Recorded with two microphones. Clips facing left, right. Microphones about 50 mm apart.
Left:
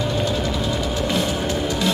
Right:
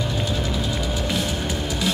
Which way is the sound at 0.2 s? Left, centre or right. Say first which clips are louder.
Left 3 dB; centre.